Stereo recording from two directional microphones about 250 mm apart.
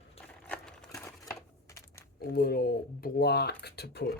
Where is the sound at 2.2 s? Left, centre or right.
Left.